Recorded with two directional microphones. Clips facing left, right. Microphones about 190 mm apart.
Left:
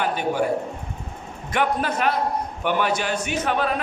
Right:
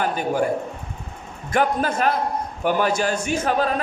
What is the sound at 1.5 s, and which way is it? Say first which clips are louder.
A man's voice: right 2 dB; 40° right (ahead or behind).